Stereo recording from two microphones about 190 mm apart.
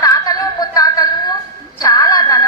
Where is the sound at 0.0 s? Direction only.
20° left (ahead or behind).